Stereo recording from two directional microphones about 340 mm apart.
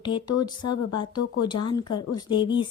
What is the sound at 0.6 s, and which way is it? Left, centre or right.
Speech, left.